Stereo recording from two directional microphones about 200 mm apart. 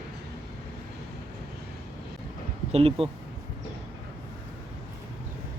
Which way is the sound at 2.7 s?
30° right (ahead or behind).